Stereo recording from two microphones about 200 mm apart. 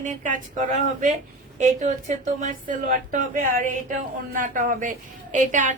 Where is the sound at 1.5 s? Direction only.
35° right (ahead or behind).